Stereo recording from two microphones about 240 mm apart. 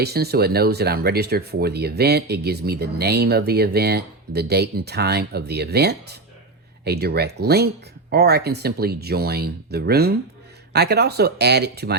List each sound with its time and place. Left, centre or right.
0.0 s speech: right